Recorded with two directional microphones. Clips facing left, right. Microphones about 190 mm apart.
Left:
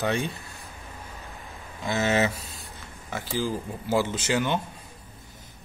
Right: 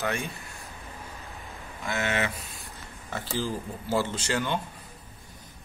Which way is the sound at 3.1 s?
10° left (ahead or behind).